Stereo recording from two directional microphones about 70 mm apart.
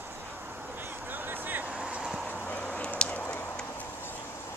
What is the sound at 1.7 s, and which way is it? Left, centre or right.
Vehicle, centre.